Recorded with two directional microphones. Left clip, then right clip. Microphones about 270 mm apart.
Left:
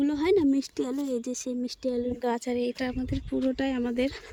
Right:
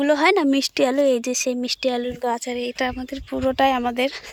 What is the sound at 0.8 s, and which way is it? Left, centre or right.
Speech, right.